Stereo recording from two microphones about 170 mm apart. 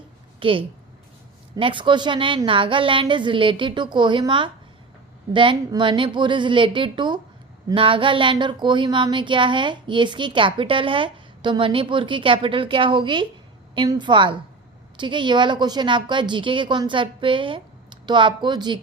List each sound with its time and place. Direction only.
0.3 s a woman's voice: 30° right (ahead or behind)